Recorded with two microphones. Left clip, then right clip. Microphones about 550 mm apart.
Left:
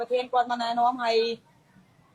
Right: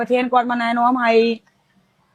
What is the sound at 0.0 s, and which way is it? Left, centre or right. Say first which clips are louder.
Speech: right 8 dB; right.